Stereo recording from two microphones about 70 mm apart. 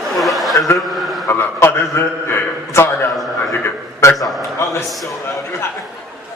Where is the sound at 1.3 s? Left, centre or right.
Left.